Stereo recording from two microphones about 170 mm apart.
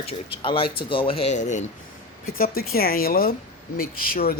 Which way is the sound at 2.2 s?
60° left (ahead or behind).